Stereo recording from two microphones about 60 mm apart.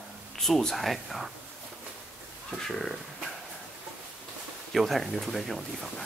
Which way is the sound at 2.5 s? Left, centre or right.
Centre.